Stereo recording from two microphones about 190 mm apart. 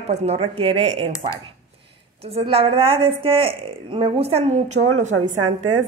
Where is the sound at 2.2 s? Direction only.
30° right (ahead or behind).